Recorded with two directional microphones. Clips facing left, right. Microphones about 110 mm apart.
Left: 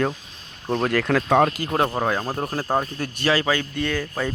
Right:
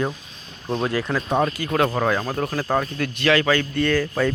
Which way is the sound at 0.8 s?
50° left (ahead or behind).